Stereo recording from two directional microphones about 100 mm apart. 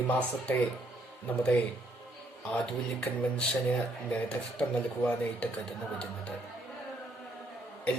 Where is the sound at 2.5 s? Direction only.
15° left (ahead or behind).